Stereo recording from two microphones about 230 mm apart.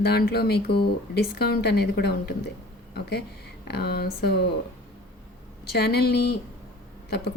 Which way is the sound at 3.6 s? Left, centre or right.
Left.